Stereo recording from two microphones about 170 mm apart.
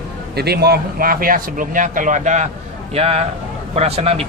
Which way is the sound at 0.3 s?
70° right (ahead or behind).